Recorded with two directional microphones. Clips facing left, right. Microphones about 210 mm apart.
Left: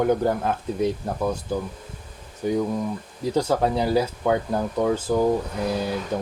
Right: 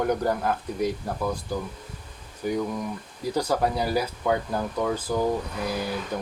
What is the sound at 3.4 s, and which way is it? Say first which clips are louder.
Speech: left 3 dB; 25° left (ahead or behind).